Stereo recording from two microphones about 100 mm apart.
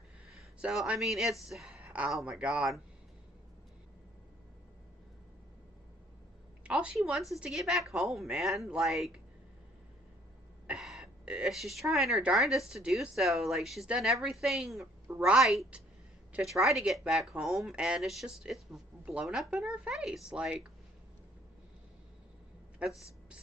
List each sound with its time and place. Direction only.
0.6 s speech: 10° right (ahead or behind)
6.6 s a woman's voice: 10° right (ahead or behind)
10.7 s speech: 5° right (ahead or behind)
22.8 s speech: 10° right (ahead or behind)